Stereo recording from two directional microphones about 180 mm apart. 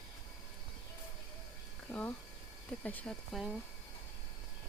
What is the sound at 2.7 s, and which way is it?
Speech, 10° left (ahead or behind).